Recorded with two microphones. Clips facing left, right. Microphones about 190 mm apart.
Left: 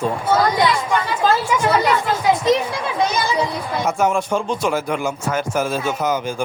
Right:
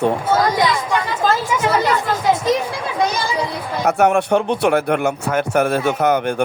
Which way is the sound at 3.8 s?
65° right (ahead or behind).